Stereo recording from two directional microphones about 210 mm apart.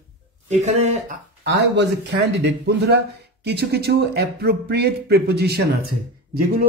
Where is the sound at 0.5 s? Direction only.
30° right (ahead or behind).